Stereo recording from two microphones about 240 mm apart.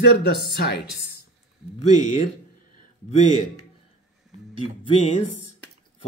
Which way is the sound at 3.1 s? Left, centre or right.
Left.